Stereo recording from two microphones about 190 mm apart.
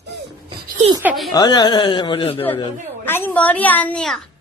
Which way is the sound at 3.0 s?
10° left (ahead or behind).